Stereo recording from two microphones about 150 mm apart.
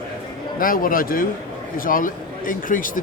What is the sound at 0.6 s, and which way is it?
A man's voice, 70° left (ahead or behind).